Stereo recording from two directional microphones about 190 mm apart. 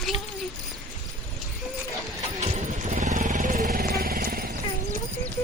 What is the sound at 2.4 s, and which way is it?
Vehicle, 35° right (ahead or behind).